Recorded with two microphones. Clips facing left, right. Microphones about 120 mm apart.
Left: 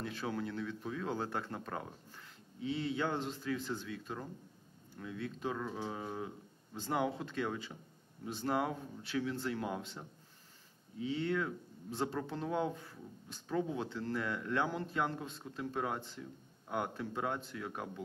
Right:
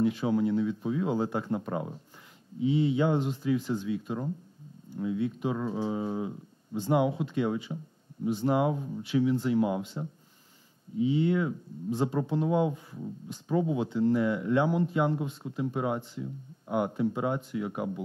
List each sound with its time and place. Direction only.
0.0 s speech: 15° right (ahead or behind)